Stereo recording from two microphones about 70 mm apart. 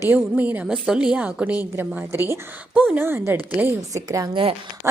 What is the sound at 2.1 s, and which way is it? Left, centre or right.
Speech, right.